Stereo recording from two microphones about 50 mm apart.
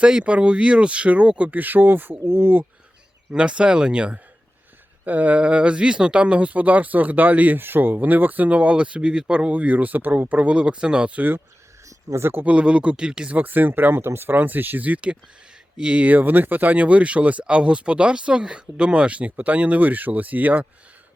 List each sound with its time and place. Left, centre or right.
0.0 s speech: right
2.2 s speech: right
3.3 s speech: right
5.0 s speech: right
7.6 s speech: right
11.9 s speech: right
12.5 s speech: right
13.3 s speech: right
14.3 s speech: right